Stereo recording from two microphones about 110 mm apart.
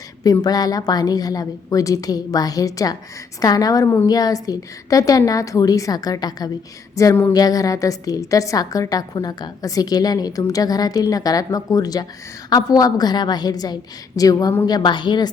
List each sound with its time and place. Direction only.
0.2 s a woman's voice: 35° left (ahead or behind)